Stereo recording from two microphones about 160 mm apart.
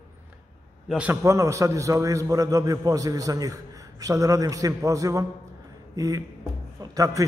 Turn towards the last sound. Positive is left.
turn(degrees=-20)  # may be behind; listen again after turning